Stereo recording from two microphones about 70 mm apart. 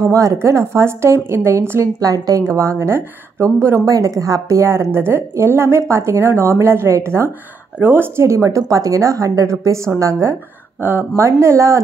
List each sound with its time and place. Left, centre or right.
0.0 s a woman's voice: right
2.0 s a woman's voice: right
2.5 s a woman's voice: right
8.3 s a woman's voice: right
10.8 s a woman's voice: right